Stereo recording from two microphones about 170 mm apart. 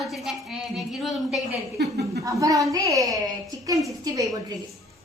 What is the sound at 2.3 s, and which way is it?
A woman's voice, 20° right (ahead or behind).